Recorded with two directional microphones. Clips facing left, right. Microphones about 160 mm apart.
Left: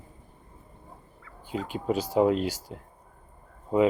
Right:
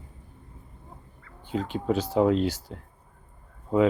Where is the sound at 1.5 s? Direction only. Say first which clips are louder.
Right 2 dB; 10° left (ahead or behind).